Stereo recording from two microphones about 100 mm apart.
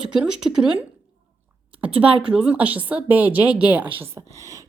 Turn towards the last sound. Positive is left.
turn(degrees=-30)  # may be behind; listen again after turning